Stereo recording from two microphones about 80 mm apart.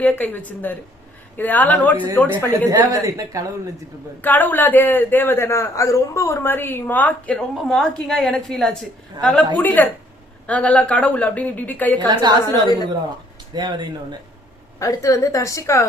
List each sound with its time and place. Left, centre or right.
0.0 s a man's voice: left
2.6 s a woman's voice: right
4.2 s a man's voice: left
7.3 s a woman's voice: centre
11.9 s a woman's voice: right
14.8 s a woman's voice: left